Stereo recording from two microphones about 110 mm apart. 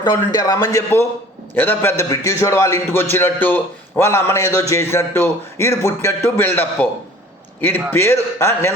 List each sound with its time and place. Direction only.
0.0 s a man's voice: 40° left (ahead or behind)
1.5 s a man's voice: 20° left (ahead or behind)